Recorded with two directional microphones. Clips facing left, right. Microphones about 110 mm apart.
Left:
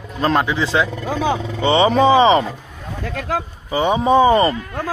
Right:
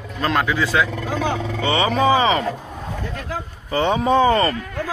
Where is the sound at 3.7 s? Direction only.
15° left (ahead or behind).